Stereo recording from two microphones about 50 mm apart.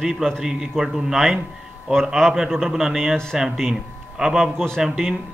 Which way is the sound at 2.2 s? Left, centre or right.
Centre.